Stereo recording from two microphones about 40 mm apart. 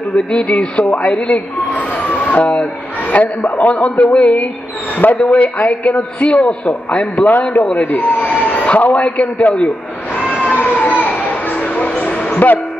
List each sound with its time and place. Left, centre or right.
0.1 s speech: left
3.1 s a man's voice: left
8.4 s emergency vehicle: left
8.7 s a man's voice: left
10.5 s a sound: left
12.3 s music: left